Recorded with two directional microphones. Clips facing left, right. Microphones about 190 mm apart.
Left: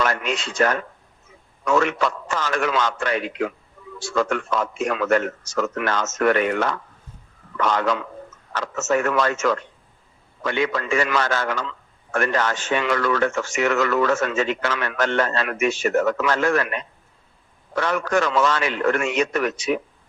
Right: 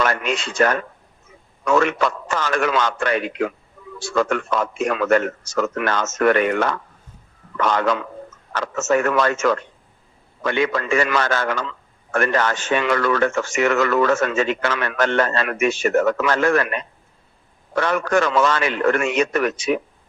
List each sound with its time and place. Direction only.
0.0 s speech: 60° right (ahead or behind)